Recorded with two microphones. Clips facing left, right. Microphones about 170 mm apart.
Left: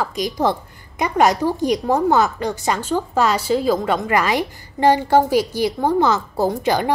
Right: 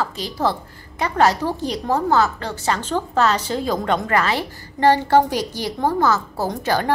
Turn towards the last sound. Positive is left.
turn(degrees=15)  # may be behind; listen again after turning